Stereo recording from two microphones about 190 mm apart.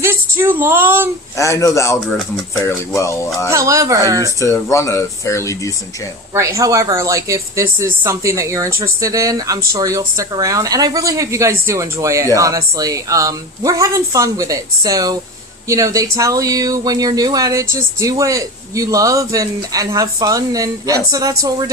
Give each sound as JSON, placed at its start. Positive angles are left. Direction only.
{"t": 0.0, "sound": "a woman's voice", "side_deg": -10}
{"t": 1.4, "sound": "speech", "side_deg": 15}
{"t": 3.5, "sound": "speech", "side_deg": -15}
{"t": 4.4, "sound": "speech", "side_deg": 15}
{"t": 6.3, "sound": "speech", "side_deg": -15}